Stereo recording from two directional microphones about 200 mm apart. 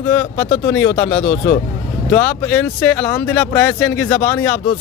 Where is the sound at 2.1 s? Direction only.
10° left (ahead or behind).